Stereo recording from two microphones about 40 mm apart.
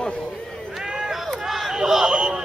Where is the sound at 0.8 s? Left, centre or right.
Centre.